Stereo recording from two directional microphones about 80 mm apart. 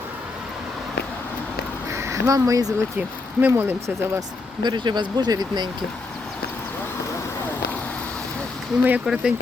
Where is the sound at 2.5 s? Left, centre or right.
Right.